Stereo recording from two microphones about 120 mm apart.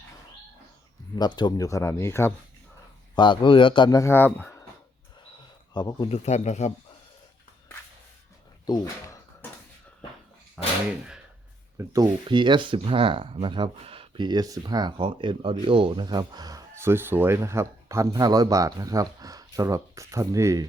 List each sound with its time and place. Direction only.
1.1 s speech: 35° left (ahead or behind); by 2.3 s 20° left (ahead or behind)
3.2 s a man's voice: 45° left (ahead or behind)
3.8 s speech: 25° left (ahead or behind)
5.7 s speech: 40° left (ahead or behind)
6.1 s a man's voice: 65° left (ahead or behind)
8.6 s a sound: 30° left (ahead or behind)
10.6 s a sound: 10° right (ahead or behind)
11.8 s speech: 25° right (ahead or behind)
12.3 s speech: 40° right (ahead or behind)